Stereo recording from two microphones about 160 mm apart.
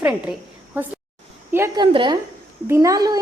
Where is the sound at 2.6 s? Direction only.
15° right (ahead or behind).